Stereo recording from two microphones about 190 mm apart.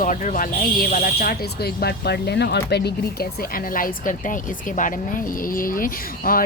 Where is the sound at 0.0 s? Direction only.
40° left (ahead or behind).